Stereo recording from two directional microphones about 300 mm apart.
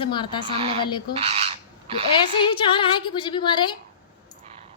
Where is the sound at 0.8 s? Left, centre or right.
Centre.